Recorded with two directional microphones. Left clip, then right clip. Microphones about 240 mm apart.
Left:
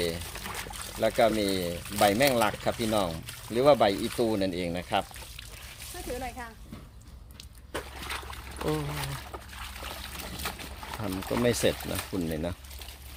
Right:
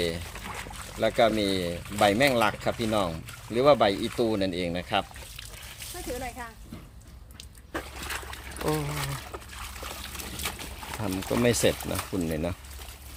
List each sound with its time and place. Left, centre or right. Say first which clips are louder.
0.3 s pour: even; left
0.9 s speech: right 1 dB; centre
6.1 s speech: right 1 dB; centre
8.0 s a sound: right 1 dB; centre
8.7 s trickle: right 2 dB; centre